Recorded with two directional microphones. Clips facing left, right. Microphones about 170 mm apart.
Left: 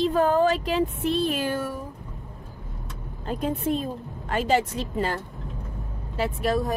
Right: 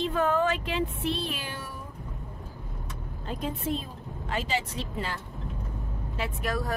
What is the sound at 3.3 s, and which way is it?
A woman's voice, 50° left (ahead or behind).